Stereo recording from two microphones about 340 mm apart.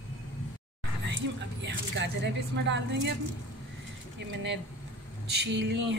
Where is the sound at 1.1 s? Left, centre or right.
Right.